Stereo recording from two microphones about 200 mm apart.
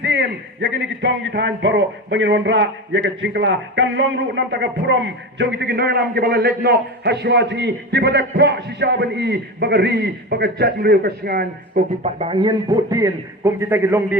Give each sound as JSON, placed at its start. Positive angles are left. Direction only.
{"t": 0.0, "sound": "a man's voice", "side_deg": -60}
{"t": 12.0, "sound": "a man's voice", "side_deg": -30}